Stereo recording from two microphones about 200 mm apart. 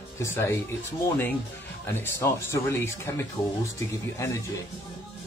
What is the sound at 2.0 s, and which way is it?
Speech, 10° left (ahead or behind).